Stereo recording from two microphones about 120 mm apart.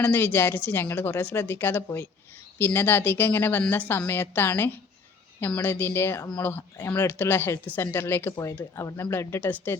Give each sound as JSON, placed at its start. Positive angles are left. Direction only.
{"t": 0.0, "sound": "a woman's voice", "side_deg": 15}